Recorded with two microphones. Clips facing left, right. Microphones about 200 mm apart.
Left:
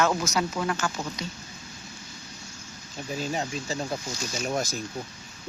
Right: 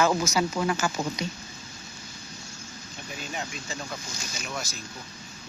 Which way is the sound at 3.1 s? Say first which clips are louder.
Left 6 dB; 35° left (ahead or behind).